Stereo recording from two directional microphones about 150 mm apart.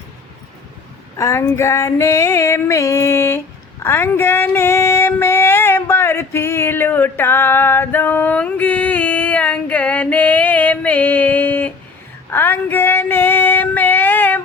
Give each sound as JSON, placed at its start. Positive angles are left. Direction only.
{"t": 1.2, "sound": "female singing", "side_deg": 15}